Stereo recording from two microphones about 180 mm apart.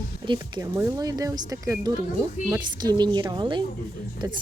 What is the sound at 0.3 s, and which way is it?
A woman's voice, 20° right (ahead or behind).